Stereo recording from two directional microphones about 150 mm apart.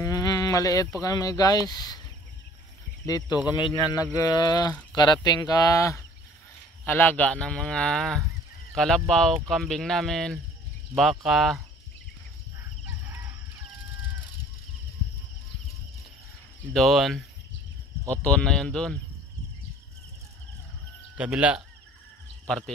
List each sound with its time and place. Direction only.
0.0 s a sound: 25° left (ahead or behind)
1.0 s speech: 25° left (ahead or behind)
3.1 s speech: 25° left (ahead or behind); by 11.6 s centre (ahead or behind)
12.5 s chicken: 15° right (ahead or behind)
16.7 s speech: centre (ahead or behind)
21.2 s speech: 10° right (ahead or behind)
22.5 s speech: 5° left (ahead or behind)